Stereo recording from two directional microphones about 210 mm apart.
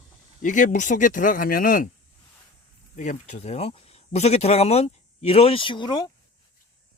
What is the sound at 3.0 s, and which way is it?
Speech, 35° left (ahead or behind).